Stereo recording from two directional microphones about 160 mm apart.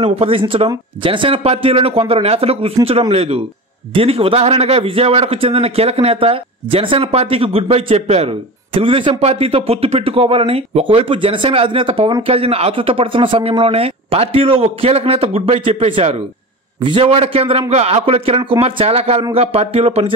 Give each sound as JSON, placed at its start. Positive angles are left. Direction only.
{"t": 0.0, "sound": "a man's voice", "side_deg": -35}